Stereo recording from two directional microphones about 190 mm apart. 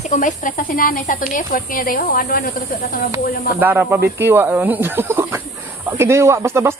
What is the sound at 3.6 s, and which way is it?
Speech, 10° right (ahead or behind).